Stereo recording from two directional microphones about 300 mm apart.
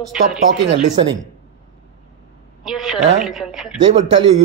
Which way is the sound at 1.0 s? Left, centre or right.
Centre.